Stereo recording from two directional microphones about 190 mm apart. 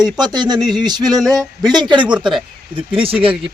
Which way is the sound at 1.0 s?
Centre (ahead or behind).